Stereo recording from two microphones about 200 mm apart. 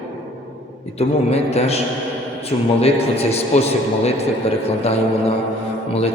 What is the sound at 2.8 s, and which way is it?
A man's voice, 30° left (ahead or behind).